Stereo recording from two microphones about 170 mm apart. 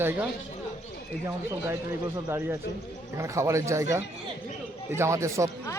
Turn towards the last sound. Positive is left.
turn(degrees=-15)  # may be behind; listen again after turning